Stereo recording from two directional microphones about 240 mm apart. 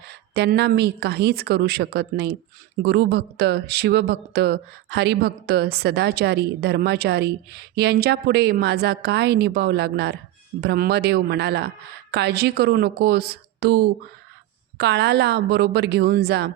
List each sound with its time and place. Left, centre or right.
0.1 s a woman's voice: right